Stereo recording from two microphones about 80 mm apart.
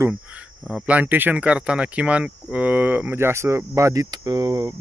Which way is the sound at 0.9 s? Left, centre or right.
Right.